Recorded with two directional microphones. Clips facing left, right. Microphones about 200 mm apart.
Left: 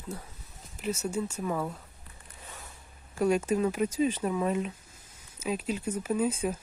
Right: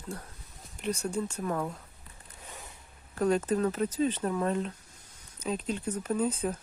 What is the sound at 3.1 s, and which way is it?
Speech, 10° left (ahead or behind).